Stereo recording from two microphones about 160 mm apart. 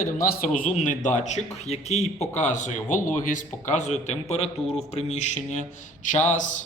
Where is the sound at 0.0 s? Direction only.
60° left (ahead or behind).